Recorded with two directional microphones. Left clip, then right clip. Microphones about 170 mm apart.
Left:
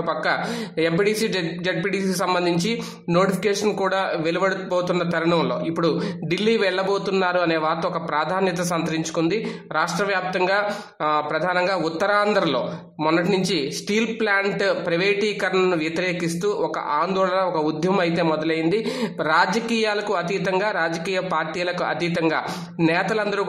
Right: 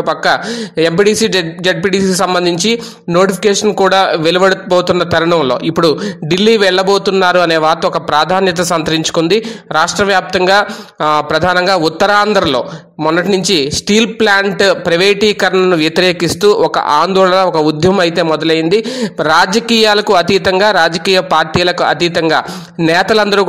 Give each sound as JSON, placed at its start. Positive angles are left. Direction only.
{"t": 0.0, "sound": "a man's voice", "side_deg": -40}